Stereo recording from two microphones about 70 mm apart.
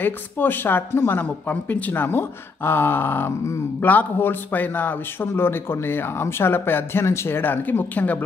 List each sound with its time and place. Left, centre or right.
0.0 s speech: left